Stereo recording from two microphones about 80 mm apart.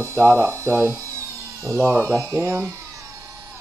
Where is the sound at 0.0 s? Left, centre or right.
Right.